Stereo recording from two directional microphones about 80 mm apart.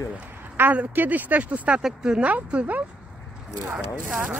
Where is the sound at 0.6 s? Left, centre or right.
Right.